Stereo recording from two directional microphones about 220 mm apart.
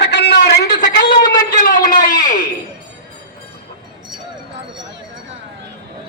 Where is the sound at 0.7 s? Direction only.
20° left (ahead or behind).